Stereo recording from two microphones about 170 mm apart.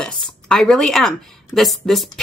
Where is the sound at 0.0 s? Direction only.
5° left (ahead or behind).